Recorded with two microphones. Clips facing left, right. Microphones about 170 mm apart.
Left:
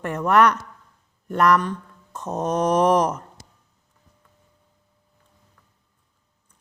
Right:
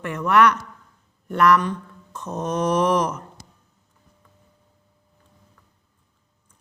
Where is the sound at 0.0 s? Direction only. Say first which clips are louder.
Even; 40° left (ahead or behind).